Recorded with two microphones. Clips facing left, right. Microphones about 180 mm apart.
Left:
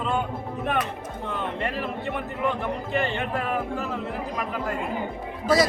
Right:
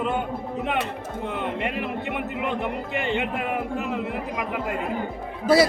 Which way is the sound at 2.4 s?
20° right (ahead or behind).